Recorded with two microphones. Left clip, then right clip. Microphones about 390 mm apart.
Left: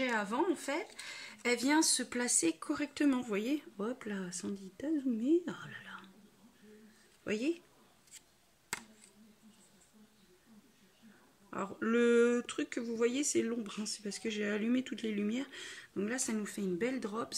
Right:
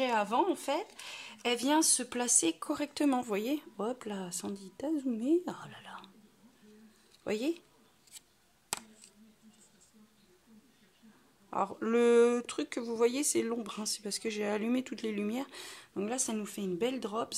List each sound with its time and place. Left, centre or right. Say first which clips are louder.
0.0 s speech: right 4 dB; centre
7.2 s speech: right 2 dB; centre
11.5 s speech: right 3 dB; centre